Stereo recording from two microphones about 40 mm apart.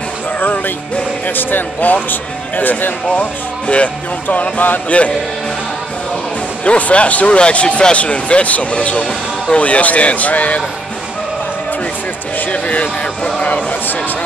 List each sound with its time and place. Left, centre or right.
0.4 s music: left
1.2 s speech: left
3.6 s speech: left
6.6 s speech: left
12.4 s speech: left